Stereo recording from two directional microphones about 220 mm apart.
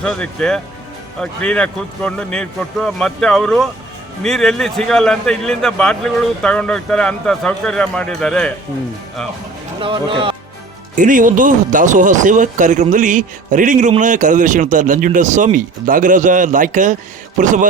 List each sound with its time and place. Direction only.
0.0 s a man's voice: 5° left (ahead or behind)
9.8 s speech: 25° right (ahead or behind)
10.9 s speech: 35° right (ahead or behind)